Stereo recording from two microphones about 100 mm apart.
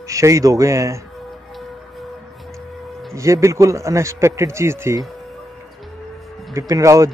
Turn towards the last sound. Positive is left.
turn(degrees=-30)  # may be behind; listen again after turning